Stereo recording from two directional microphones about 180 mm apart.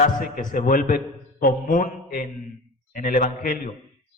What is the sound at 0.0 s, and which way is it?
A man's voice, 50° left (ahead or behind).